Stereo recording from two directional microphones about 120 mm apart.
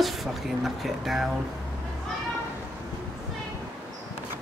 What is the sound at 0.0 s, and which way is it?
Speech, centre (ahead or behind).